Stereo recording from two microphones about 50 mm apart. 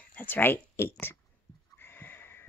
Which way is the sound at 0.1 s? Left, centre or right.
Left.